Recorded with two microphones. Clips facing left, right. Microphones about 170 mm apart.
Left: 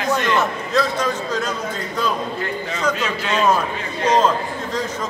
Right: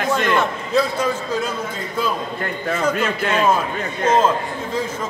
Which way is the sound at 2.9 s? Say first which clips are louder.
Right 2 dB; 55° right (ahead or behind).